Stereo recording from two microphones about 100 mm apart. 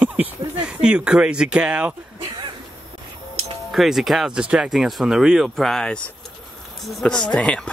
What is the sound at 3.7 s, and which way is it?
Speech, centre (ahead or behind).